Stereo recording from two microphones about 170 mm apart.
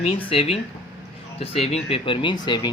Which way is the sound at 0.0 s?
35° left (ahead or behind).